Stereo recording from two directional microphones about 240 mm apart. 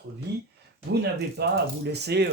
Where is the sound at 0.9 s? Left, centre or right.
Right.